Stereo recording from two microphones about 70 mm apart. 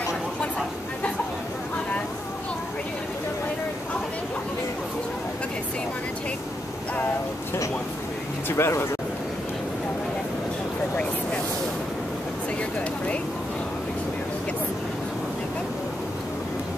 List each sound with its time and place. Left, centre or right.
8.5 s speech: left